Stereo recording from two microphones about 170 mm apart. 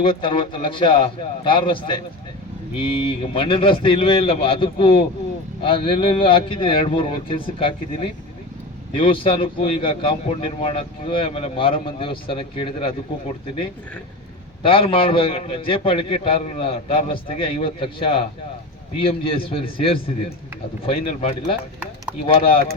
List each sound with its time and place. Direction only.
0.0 s a man's voice: 30° left (ahead or behind)
9.0 s a man's voice: 30° left (ahead or behind)
14.6 s a man's voice: 30° left (ahead or behind)